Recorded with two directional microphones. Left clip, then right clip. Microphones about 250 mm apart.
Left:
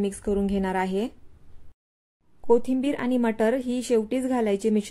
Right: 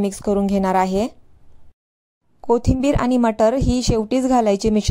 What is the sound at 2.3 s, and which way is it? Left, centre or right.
Speech, right.